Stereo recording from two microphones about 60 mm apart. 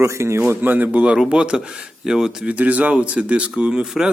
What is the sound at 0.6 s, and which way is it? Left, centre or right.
A man's voice, right.